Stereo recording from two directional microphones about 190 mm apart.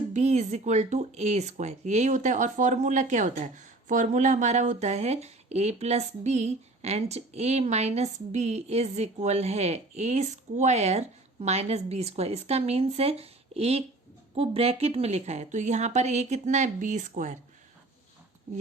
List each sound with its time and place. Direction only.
0.1 s speech: 35° right (ahead or behind)